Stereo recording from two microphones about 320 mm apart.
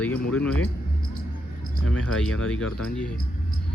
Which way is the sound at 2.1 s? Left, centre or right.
Centre.